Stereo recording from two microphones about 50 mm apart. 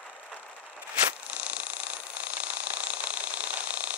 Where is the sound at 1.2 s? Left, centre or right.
Right.